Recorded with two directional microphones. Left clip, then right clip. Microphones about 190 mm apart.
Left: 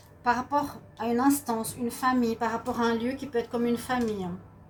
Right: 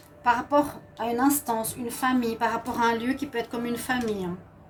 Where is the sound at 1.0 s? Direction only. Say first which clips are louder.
Right 1 dB; 40° right (ahead or behind).